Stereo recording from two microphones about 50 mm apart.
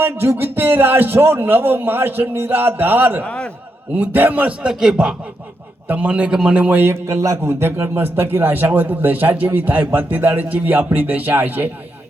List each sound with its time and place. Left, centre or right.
0.0 s a man's voice: right
3.2 s a man's voice: left
3.9 s speech: right
4.6 s speech: centre
5.9 s a man's voice: right
6.7 s a man's voice: right
7.1 s speech: right
7.6 s speech: right